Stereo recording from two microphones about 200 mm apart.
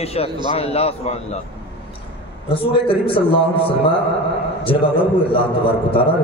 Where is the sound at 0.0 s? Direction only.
30° left (ahead or behind).